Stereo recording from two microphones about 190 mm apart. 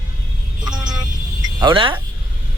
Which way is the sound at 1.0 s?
20° right (ahead or behind).